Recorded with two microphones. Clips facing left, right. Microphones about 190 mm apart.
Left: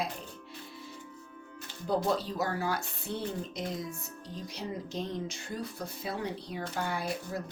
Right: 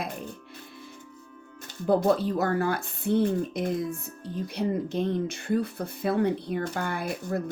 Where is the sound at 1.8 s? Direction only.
55° right (ahead or behind).